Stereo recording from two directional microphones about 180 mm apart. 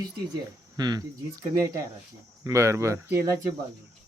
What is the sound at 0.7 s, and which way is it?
Speech, 25° right (ahead or behind).